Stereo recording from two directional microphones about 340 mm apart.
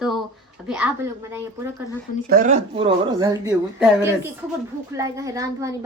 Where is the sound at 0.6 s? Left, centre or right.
Centre.